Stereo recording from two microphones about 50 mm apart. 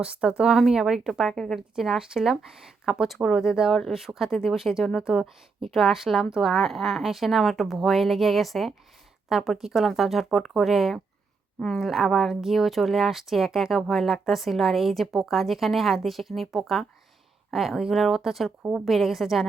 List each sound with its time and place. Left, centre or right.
0.0 s speech: centre
1.3 s a woman's voice: centre
1.5 s speech: centre
3.7 s a woman's voice: centre
3.9 s speech: centre